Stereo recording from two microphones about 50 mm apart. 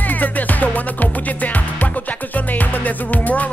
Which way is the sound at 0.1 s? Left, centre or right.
Left.